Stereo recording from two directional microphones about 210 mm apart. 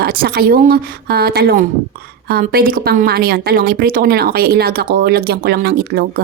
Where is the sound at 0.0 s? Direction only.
45° right (ahead or behind).